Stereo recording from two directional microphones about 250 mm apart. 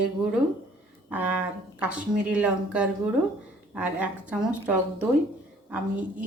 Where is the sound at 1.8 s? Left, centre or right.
Centre.